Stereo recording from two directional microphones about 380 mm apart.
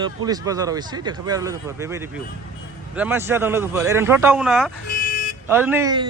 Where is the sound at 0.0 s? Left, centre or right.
Centre.